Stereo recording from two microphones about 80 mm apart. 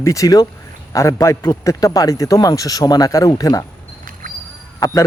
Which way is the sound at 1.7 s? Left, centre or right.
Left.